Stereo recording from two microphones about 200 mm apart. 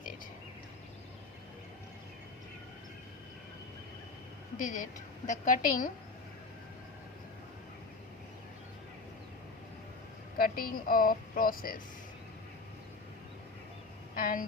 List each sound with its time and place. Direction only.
4.5 s a woman's voice: 40° left (ahead or behind)
10.3 s a woman's voice: 45° left (ahead or behind)
14.2 s a woman's voice: 45° left (ahead or behind)